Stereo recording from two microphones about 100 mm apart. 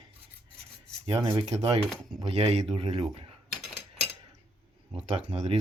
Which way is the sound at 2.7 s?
75° right (ahead or behind).